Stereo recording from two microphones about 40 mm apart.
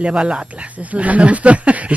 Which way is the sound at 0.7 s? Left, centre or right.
Right.